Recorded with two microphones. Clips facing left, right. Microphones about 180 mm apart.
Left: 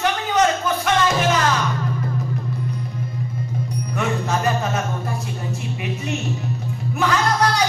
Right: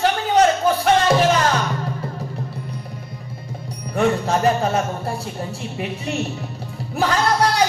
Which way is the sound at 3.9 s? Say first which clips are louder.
Right 5 dB; 30° right (ahead or behind).